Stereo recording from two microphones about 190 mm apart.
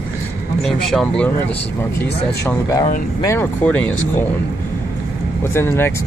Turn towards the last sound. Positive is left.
turn(degrees=10)  # may be behind; listen again after turning